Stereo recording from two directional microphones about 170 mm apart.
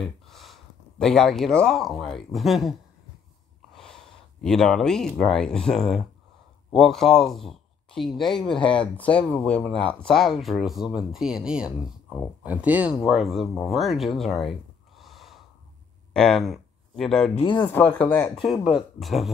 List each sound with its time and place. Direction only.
0.0 s speech: centre (ahead or behind)
3.7 s a man's voice: centre (ahead or behind)
17.4 s speech: 30° left (ahead or behind)
17.6 s speech: 10° left (ahead or behind)